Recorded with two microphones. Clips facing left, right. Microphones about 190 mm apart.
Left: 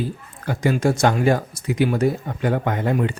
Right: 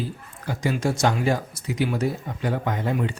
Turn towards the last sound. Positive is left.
turn(degrees=55)  # may be behind; listen again after turning